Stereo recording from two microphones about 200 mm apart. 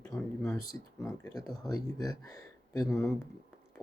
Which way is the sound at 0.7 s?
10° left (ahead or behind).